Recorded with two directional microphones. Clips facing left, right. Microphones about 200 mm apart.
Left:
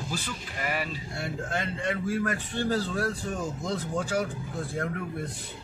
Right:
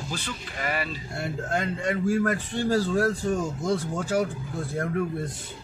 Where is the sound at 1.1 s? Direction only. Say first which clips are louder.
Right 6 dB; 50° right (ahead or behind).